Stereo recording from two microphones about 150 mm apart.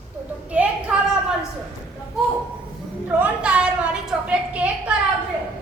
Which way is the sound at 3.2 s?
10° right (ahead or behind).